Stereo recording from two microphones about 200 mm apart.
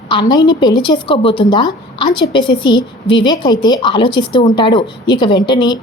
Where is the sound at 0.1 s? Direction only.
20° left (ahead or behind).